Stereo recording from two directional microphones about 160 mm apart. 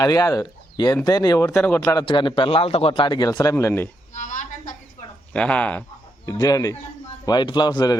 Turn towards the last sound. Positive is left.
turn(degrees=25)  # may be behind; listen again after turning